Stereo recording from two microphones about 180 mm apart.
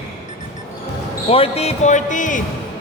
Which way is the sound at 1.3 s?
35° left (ahead or behind).